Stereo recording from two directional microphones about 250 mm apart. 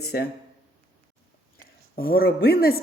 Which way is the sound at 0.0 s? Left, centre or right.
Left.